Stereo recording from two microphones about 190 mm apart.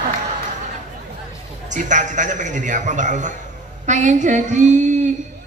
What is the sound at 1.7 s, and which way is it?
A man's voice, 40° right (ahead or behind).